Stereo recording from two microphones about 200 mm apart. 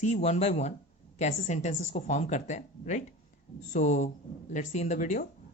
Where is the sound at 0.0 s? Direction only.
35° left (ahead or behind).